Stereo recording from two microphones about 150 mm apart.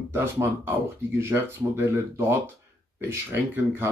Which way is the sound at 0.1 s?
15° right (ahead or behind).